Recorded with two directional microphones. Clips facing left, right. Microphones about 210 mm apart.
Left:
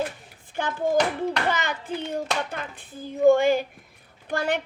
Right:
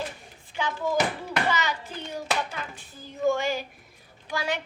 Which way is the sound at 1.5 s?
55° left (ahead or behind).